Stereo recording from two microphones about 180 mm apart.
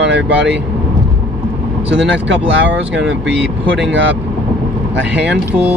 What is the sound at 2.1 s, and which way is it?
Speech, 85° right.